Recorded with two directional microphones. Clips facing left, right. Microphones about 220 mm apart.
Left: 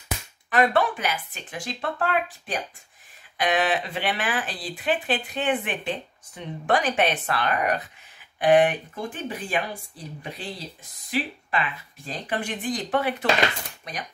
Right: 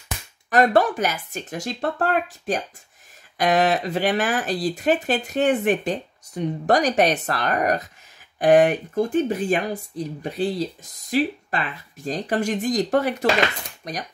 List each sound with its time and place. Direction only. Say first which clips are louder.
0.5 s speech: right 4 dB; 40° right (ahead or behind)